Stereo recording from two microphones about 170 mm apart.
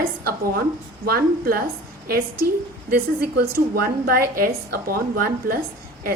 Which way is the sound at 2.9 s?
65° right (ahead or behind).